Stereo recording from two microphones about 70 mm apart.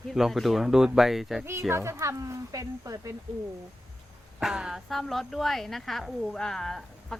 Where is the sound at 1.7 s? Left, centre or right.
Right.